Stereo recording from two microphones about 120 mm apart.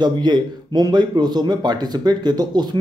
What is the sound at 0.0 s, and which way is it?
Speech, 40° right (ahead or behind).